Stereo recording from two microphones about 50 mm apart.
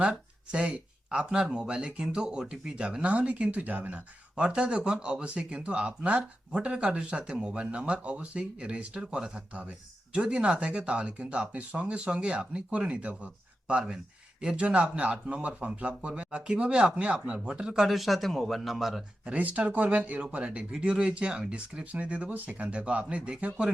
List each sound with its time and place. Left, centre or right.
0.0 s speech: right
4.4 s speech: right
17.8 s speech: centre
19.2 s speech: right